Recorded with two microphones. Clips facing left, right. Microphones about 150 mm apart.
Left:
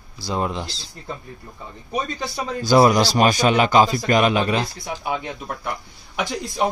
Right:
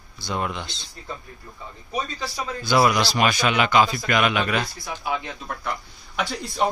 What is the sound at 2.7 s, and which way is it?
Speech, 40° left (ahead or behind).